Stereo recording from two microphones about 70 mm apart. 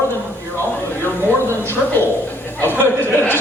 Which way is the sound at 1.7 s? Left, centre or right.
Left.